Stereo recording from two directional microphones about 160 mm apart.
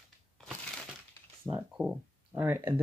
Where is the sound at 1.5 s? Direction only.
25° right (ahead or behind).